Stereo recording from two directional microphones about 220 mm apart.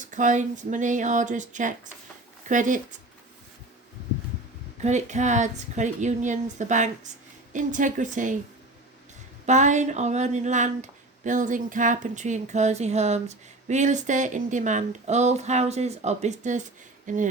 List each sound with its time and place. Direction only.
0.0 s speech: 35° right (ahead or behind)
4.8 s speech: 30° right (ahead or behind)
9.5 s speech: 35° right (ahead or behind)